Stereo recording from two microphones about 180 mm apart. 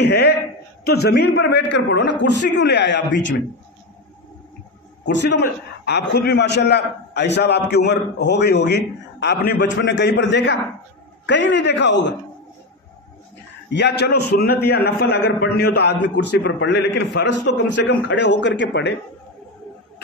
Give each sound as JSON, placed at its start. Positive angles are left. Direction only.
{"t": 0.0, "sound": "a sound", "side_deg": 70}
{"t": 0.8, "sound": "a man's voice", "side_deg": 60}
{"t": 5.0, "sound": "a man's voice", "side_deg": 70}
{"t": 13.7, "sound": "a man's voice", "side_deg": 70}